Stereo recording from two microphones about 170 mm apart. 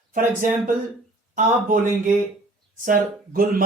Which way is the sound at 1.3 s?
50° right (ahead or behind).